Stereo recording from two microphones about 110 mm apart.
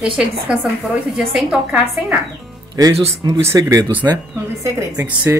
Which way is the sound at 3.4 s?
25° right (ahead or behind).